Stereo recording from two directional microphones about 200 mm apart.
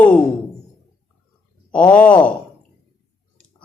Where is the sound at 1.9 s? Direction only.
5° left (ahead or behind).